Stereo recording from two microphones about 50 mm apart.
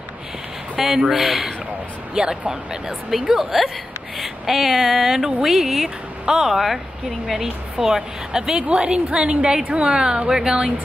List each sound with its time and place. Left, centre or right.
0.7 s speech: centre
3.3 s a woman's voice: centre